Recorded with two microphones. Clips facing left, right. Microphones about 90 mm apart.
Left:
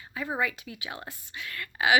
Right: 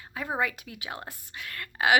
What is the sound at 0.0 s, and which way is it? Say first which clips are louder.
Speech: even; 60° right (ahead or behind).